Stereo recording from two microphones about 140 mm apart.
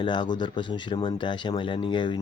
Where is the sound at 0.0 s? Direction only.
35° left (ahead or behind).